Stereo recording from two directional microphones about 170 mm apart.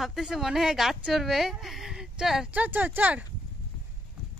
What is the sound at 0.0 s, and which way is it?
Speech, centre (ahead or behind).